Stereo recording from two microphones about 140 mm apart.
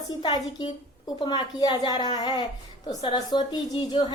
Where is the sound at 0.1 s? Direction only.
30° left (ahead or behind).